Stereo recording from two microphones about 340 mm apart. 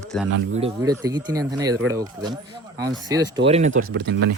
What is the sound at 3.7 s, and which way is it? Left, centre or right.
Speech, right.